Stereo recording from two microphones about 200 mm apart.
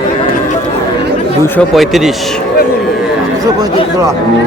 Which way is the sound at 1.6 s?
Centre (ahead or behind).